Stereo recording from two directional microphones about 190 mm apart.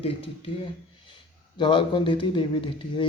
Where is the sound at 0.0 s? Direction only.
30° left (ahead or behind).